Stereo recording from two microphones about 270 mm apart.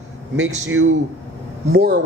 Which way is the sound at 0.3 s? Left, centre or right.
Right.